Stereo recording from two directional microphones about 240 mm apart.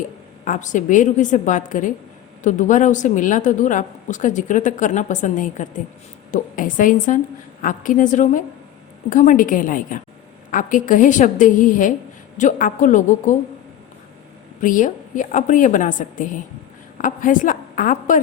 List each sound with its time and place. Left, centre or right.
0.4 s a woman's voice: left
14.6 s a woman's voice: left